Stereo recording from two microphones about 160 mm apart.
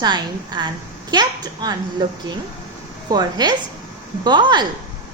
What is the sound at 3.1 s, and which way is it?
A woman's voice, 25° right (ahead or behind).